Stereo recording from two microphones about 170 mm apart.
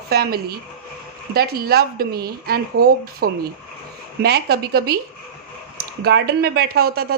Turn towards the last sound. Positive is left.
turn(degrees=-65)  # may be behind; listen again after turning